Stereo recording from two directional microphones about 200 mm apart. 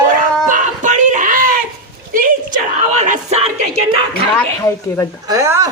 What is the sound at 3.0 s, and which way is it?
Speech, 35° right (ahead or behind).